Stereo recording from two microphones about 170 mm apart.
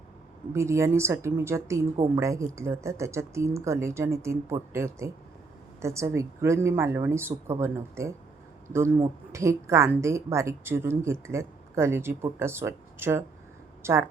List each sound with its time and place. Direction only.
0.5 s a woman's voice: 15° right (ahead or behind)